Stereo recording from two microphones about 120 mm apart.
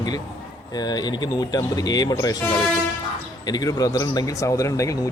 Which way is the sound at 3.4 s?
35° left (ahead or behind).